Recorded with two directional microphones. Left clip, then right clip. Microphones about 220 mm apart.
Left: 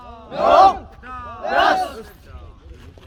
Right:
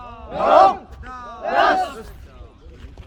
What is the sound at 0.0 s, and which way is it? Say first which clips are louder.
Battle cry: right 2 dB; 25° left (ahead or behind).